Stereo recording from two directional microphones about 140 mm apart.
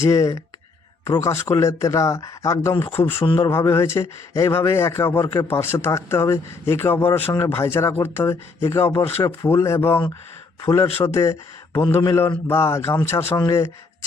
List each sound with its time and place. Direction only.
0.0 s speech: 25° left (ahead or behind)